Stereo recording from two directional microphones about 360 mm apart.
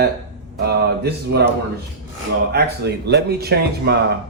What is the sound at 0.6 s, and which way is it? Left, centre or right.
Speech, right.